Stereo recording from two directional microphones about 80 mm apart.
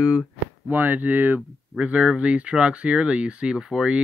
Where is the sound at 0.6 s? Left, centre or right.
Right; by 4.0 s centre.